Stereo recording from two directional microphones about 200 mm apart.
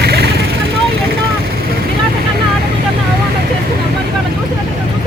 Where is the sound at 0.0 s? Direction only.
55° right (ahead or behind).